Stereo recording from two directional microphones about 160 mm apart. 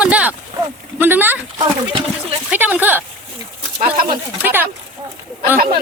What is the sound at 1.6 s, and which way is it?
Speech, 35° right (ahead or behind).